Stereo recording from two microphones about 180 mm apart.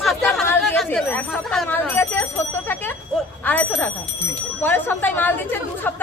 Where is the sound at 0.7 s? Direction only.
5° left (ahead or behind).